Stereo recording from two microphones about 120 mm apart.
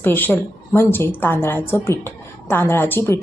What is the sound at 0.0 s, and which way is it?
A woman's voice, 15° left (ahead or behind).